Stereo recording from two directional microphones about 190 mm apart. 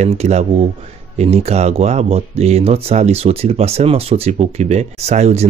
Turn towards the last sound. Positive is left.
turn(degrees=-35)  # may be behind; listen again after turning